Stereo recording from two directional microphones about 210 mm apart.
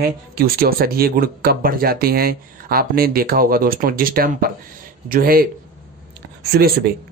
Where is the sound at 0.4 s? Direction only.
45° right (ahead or behind).